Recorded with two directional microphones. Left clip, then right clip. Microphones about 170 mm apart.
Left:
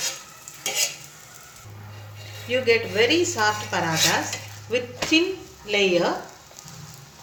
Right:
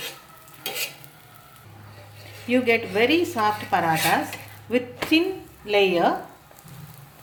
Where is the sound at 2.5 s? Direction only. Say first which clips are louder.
Even; 55° right (ahead or behind).